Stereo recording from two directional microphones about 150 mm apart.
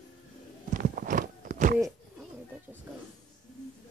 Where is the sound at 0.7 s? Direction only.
60° right (ahead or behind).